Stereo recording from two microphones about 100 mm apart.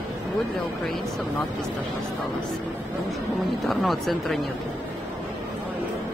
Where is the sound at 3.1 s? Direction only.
Centre (ahead or behind).